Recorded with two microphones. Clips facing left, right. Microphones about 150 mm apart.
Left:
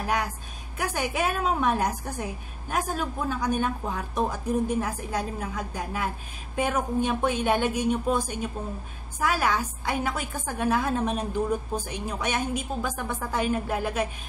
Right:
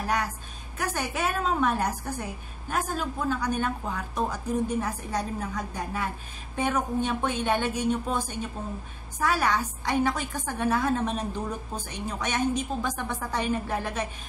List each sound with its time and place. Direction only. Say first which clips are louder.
0.7 s a woman's voice: left 2 dB; 10° left (ahead or behind)